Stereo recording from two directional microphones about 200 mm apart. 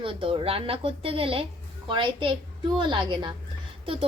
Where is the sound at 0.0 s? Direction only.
25° right (ahead or behind).